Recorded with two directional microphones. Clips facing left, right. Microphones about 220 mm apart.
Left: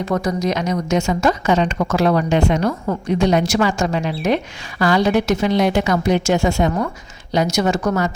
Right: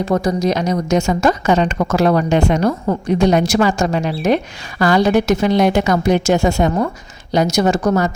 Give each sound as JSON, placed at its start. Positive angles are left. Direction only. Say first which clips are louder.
{"t": 0.0, "sound": "a woman's voice", "louder": "right 3 dB", "side_deg": -30}